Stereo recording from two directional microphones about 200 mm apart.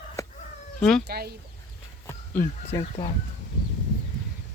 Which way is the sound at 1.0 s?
50° right (ahead or behind).